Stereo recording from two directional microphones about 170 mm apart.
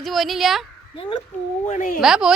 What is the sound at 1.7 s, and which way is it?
Speech, 50° left (ahead or behind).